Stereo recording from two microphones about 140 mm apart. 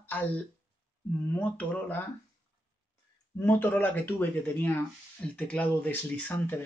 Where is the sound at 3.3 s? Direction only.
15° left (ahead or behind).